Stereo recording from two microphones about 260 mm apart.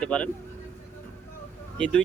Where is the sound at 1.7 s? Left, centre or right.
Centre.